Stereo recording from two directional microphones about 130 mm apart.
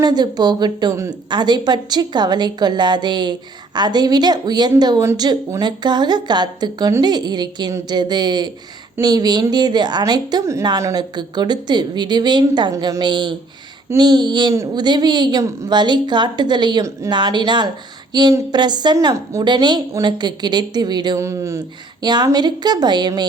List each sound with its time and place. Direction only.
0.0 s a woman's voice: 35° right (ahead or behind)
21.2 s a woman's voice: 25° right (ahead or behind)